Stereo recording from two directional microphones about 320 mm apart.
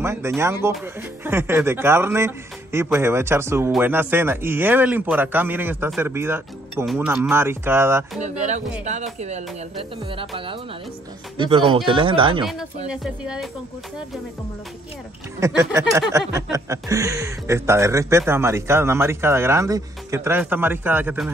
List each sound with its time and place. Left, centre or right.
0.0 s speech: centre
8.2 s speech: right
12.9 s speech: centre
15.4 s speech: centre